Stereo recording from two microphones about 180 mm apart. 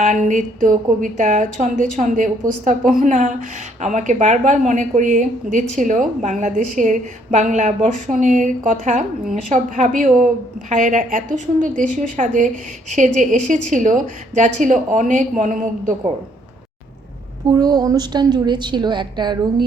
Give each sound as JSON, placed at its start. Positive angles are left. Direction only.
{"t": 0.0, "sound": "a woman's voice", "side_deg": -45}
{"t": 17.5, "sound": "a woman's voice", "side_deg": -20}